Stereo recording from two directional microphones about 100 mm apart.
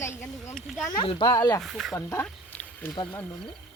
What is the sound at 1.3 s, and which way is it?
Speech, 35° left (ahead or behind).